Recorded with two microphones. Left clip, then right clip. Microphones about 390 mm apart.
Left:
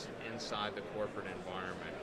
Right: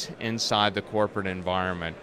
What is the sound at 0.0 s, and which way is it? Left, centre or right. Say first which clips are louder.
Speech: right 12 dB; right.